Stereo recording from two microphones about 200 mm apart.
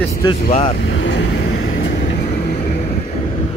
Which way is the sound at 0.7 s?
65° left (ahead or behind).